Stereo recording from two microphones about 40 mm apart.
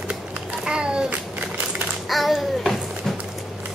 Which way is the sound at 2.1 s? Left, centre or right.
Centre.